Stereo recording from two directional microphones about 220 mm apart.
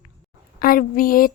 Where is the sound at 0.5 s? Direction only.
40° left (ahead or behind).